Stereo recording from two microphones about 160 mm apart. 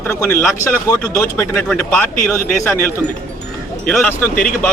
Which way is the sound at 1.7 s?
5° left (ahead or behind).